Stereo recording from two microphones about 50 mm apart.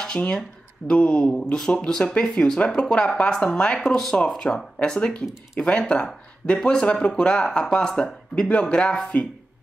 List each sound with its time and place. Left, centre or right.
0.4 s speech: centre
3.9 s speech: centre; by 9.3 s left